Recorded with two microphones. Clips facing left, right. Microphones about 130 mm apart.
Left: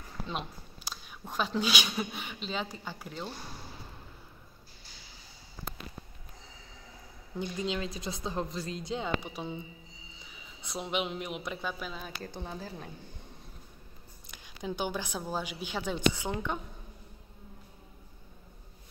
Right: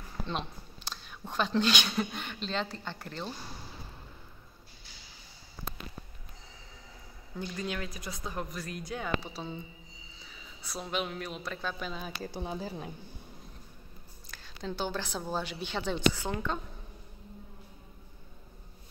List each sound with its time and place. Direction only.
0.2 s speech: 5° left (ahead or behind)
7.3 s a man's voice: 20° left (ahead or behind)
11.8 s a woman's voice: centre (ahead or behind)
12.4 s a woman's voice: 15° right (ahead or behind)
14.3 s a woman's voice: 15° left (ahead or behind)